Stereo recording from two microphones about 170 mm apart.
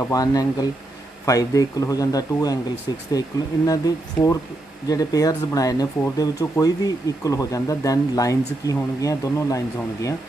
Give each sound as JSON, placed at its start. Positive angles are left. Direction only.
{"t": 0.1, "sound": "speech", "side_deg": 20}